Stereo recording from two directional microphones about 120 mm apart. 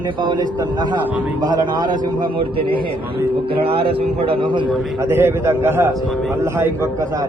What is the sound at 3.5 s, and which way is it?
A man's voice, 50° right (ahead or behind).